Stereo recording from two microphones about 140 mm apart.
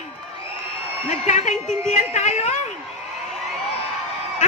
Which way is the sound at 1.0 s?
60° left (ahead or behind).